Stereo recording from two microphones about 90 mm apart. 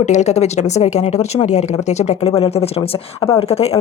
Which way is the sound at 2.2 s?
90° left.